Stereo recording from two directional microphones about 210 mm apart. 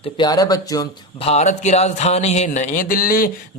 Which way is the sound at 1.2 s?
30° left (ahead or behind).